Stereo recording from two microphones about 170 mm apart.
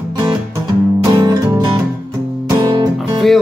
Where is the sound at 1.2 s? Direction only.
25° right (ahead or behind).